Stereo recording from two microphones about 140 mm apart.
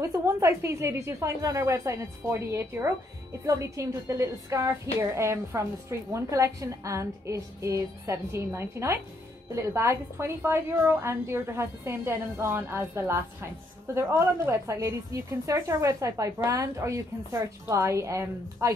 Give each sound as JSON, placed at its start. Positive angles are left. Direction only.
{"t": 0.0, "sound": "a woman's voice", "side_deg": -20}